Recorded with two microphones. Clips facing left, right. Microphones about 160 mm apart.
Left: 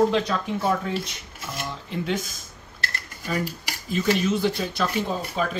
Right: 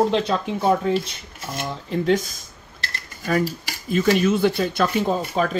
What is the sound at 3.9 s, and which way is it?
Speech, 55° right (ahead or behind).